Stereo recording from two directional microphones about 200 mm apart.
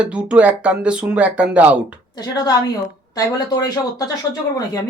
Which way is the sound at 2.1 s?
20° left (ahead or behind).